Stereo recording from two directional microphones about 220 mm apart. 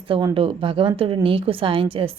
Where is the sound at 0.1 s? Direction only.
20° right (ahead or behind).